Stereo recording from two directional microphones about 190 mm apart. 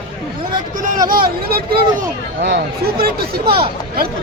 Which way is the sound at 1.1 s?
50° right (ahead or behind).